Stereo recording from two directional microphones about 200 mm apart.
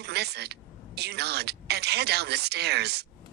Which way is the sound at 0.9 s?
55° right (ahead or behind).